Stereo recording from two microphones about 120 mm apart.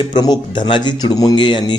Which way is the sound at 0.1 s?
35° left (ahead or behind).